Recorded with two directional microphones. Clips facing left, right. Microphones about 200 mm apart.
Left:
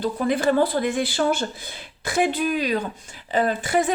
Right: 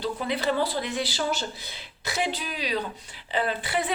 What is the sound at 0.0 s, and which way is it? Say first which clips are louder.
A woman's voice: left 6 dB; 50° left (ahead or behind).